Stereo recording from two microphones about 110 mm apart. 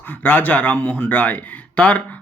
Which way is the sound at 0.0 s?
15° left (ahead or behind).